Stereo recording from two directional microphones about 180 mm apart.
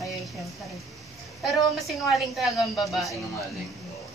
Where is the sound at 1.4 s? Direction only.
Centre (ahead or behind).